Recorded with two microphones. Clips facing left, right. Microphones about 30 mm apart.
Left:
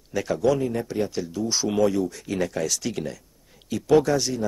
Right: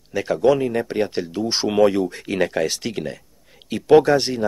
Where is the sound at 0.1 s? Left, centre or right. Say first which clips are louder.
Right 3 dB; right.